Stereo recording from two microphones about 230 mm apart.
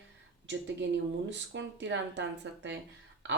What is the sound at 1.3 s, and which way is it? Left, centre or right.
Speech, right.